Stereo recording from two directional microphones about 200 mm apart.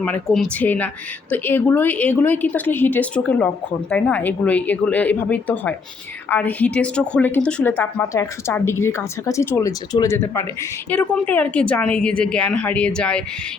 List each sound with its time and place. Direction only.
0.0 s a woman's voice: 5° left (ahead or behind)